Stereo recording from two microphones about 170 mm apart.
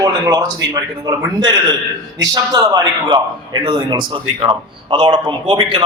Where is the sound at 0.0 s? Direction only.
25° right (ahead or behind).